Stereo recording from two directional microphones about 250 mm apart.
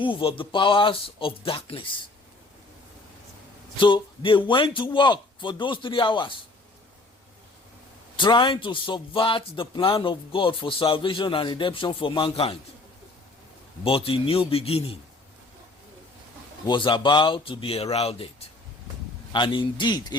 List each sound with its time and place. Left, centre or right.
0.0 s speech: centre
3.8 s speech: centre
8.1 s speech: centre
13.8 s speech: left
16.6 s speech: centre